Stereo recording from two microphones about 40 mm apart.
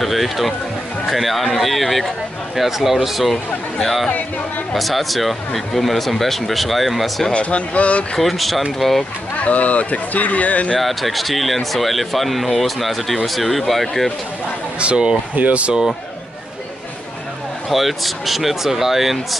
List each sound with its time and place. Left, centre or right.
0.0 s speech: centre
7.3 s speech: left
8.2 s speech: centre
9.4 s speech: left
10.8 s speech: centre
14.8 s speech: right
17.6 s speech: centre